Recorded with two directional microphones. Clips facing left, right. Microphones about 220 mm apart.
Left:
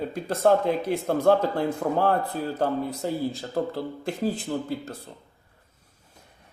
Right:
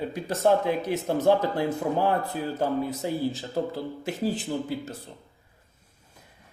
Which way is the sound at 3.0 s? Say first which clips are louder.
Even; 5° right (ahead or behind).